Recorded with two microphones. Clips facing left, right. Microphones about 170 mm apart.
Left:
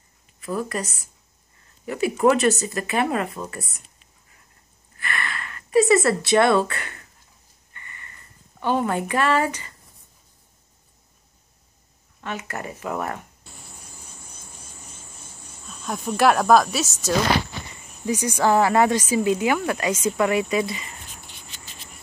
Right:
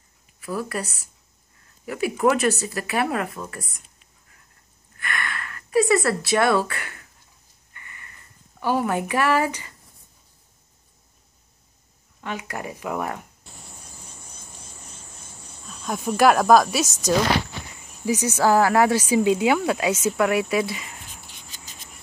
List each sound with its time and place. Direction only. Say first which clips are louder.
0.4 s speech: left 1 dB; 5° right (ahead or behind)
1.9 s a woman's voice: left 2 dB; 5° right (ahead or behind)
4.9 s speech: even; centre (ahead or behind)
8.5 s a woman's voice: even; 10° right (ahead or behind)
12.2 s a woman's voice: even; 15° right (ahead or behind)
15.6 s speech: right 2 dB; centre (ahead or behind)
18.1 s speech: right 1 dB; 10° left (ahead or behind)
18.4 s speech: even; centre (ahead or behind)
21.5 s cricket: left 1 dB; 45° right (ahead or behind)